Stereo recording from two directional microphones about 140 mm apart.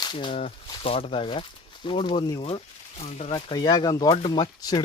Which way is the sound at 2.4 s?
45° left (ahead or behind).